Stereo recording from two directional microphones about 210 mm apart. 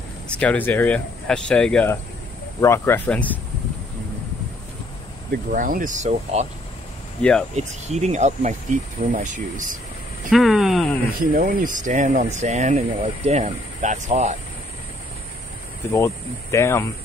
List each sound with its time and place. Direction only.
0.3 s speech: 5° left (ahead or behind)
5.5 s speech: 40° right (ahead or behind)
7.2 s speech: 5° left (ahead or behind)
7.5 s speech: 30° right (ahead or behind)
10.3 s speech: centre (ahead or behind)
11.1 s speech: 40° right (ahead or behind)
15.9 s speech: 15° left (ahead or behind)